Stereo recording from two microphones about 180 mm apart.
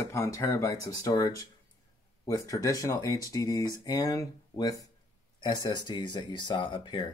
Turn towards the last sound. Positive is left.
turn(degrees=25)  # may be behind; listen again after turning